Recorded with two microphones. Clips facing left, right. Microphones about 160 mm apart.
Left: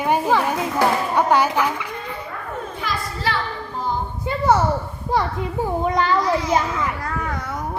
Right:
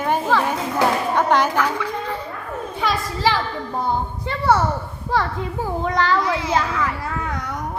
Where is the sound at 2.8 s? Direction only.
90° right.